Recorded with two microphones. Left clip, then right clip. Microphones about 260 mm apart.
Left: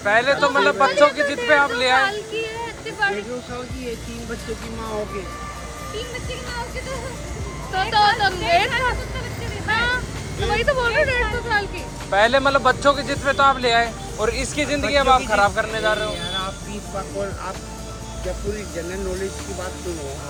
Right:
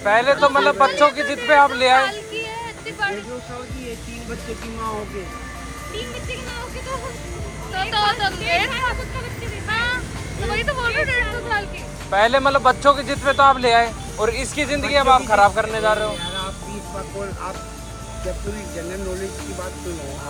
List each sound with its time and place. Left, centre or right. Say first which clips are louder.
0.0 s speech: right 2 dB; centre
2.0 s a sound: even; left
7.7 s speech: left 3 dB; left
12.1 s speech: even; centre